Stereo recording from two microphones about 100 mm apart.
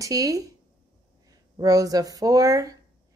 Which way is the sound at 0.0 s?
35° right (ahead or behind).